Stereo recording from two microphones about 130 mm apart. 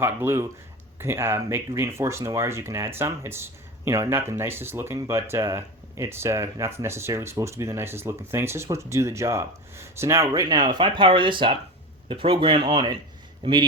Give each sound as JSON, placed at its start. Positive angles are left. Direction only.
{"t": 0.0, "sound": "speech", "side_deg": -20}